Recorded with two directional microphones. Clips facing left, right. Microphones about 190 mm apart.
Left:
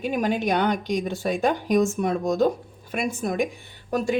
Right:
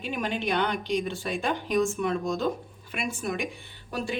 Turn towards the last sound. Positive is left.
turn(degrees=45)  # may be behind; listen again after turning